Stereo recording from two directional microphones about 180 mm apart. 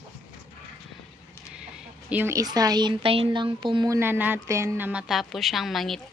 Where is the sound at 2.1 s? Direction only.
15° right (ahead or behind).